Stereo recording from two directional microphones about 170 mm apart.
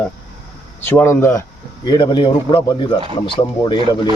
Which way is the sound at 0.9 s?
10° left (ahead or behind).